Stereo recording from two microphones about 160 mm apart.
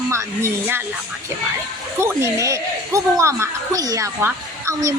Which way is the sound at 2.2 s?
20° right (ahead or behind).